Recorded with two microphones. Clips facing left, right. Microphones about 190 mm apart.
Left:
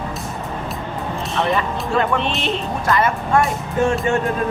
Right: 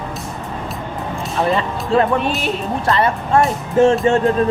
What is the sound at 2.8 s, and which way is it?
Speech, 35° right (ahead or behind).